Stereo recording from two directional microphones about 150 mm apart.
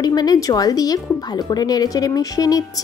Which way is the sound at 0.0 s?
25° left (ahead or behind).